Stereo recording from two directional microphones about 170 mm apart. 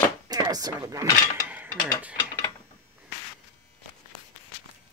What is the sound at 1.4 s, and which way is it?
Mechanisms, 10° right (ahead or behind).